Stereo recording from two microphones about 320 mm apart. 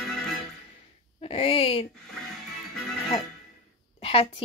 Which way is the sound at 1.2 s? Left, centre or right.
Centre.